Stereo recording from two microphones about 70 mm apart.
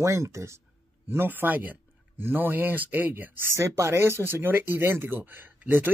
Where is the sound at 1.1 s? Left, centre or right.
Right.